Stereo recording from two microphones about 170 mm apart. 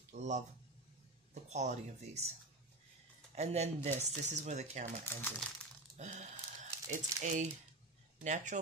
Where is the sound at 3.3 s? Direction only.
40° right (ahead or behind).